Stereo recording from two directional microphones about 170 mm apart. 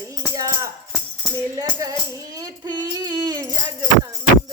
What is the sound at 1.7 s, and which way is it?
Music, 20° right (ahead or behind).